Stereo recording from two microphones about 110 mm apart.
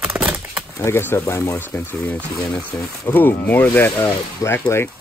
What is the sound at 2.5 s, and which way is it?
Speech, 25° left (ahead or behind).